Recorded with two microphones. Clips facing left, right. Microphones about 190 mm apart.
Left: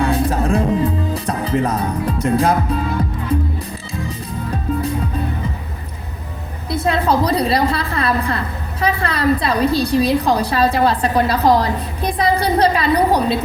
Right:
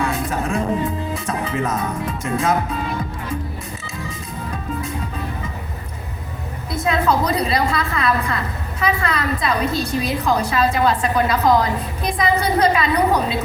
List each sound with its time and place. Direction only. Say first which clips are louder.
0.0 s music: left 5 dB; 35° left (ahead or behind)
6.7 s a woman's voice: left 2 dB; 30° left (ahead or behind)